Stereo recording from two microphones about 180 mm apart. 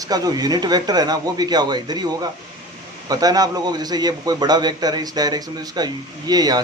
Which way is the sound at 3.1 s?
20° right (ahead or behind).